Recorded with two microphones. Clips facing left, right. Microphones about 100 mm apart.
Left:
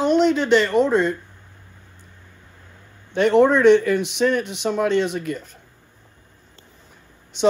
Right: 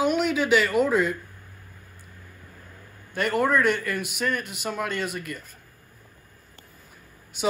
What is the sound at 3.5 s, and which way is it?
Speech, 50° right (ahead or behind).